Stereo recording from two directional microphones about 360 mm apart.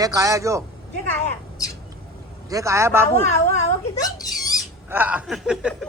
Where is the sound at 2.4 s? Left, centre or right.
Centre.